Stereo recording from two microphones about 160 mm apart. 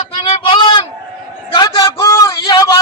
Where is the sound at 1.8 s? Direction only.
20° left (ahead or behind).